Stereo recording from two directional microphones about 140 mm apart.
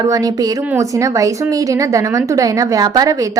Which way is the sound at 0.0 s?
25° right (ahead or behind).